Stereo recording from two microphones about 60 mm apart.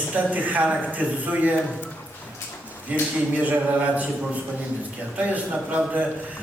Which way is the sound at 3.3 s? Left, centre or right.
Right.